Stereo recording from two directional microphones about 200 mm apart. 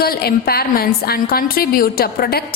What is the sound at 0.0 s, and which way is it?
A woman's voice, 50° left (ahead or behind).